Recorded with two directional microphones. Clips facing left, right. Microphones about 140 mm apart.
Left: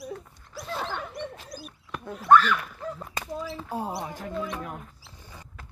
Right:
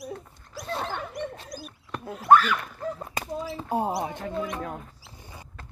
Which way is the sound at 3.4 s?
20° right (ahead or behind).